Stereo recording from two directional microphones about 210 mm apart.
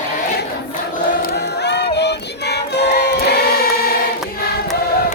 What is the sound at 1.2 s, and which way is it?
Choir, 55° left (ahead or behind).